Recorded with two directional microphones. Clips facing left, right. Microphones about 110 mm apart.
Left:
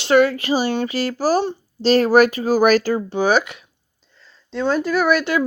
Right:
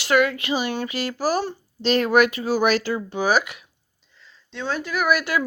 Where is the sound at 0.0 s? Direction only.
30° left (ahead or behind).